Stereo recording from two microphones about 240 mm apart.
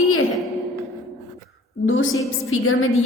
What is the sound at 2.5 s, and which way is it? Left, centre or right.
Speech, left.